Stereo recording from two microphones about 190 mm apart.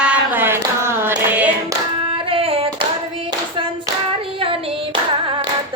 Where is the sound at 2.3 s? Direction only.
30° right (ahead or behind).